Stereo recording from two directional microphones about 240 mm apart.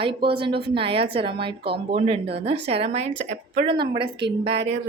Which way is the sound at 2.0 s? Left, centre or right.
Right.